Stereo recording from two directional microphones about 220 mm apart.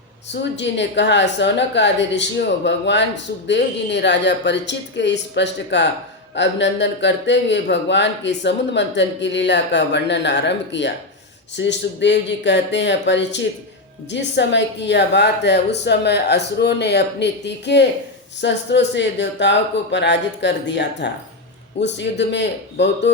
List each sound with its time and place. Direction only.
0.3 s speech: 55° left (ahead or behind)